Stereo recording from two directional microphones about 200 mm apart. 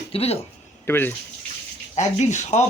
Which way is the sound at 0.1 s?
30° left (ahead or behind).